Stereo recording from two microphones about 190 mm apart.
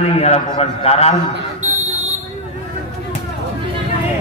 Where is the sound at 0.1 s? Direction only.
35° left (ahead or behind).